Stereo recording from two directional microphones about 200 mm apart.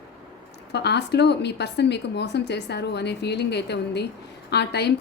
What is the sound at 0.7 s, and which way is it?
Speech, 55° left (ahead or behind).